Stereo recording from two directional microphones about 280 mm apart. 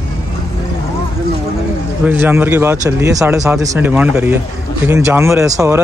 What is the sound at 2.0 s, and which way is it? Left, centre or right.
Speech, centre.